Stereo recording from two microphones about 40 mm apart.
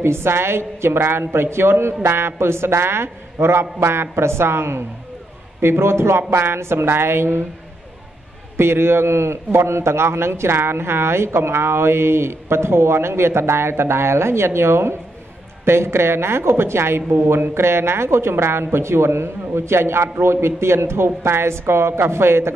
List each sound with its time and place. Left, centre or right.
0.0 s a man's voice: right
8.5 s a man's voice: right